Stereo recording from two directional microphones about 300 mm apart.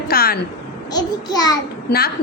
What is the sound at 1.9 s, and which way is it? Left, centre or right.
Speech, left.